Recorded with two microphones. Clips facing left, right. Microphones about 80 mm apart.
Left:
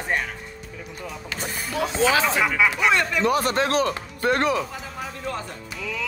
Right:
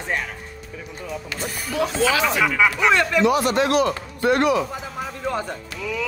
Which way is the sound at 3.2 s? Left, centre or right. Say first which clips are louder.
Right 3 dB; left.